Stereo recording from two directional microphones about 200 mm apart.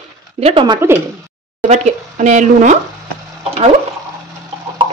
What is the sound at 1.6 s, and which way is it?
A woman's voice, 40° right (ahead or behind).